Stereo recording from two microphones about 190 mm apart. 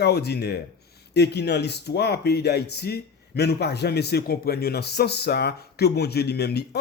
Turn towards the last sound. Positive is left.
turn(degrees=55)  # may be behind; listen again after turning